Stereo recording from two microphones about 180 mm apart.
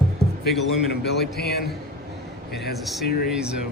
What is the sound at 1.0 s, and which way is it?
Speech, 60° left (ahead or behind).